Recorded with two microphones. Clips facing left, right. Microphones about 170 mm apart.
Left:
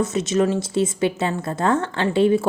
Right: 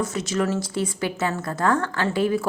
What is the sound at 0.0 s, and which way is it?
A woman's voice, 20° left (ahead or behind).